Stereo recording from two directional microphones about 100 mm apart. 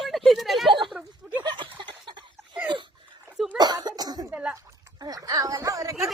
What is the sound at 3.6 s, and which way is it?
Cough, 40° right (ahead or behind).